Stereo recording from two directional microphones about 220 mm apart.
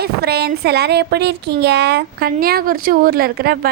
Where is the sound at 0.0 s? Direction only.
45° right (ahead or behind).